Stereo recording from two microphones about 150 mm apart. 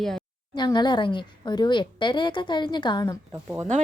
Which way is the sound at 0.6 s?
30° left (ahead or behind).